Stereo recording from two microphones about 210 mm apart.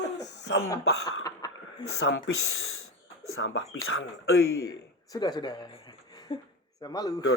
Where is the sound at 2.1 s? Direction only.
70° left (ahead or behind).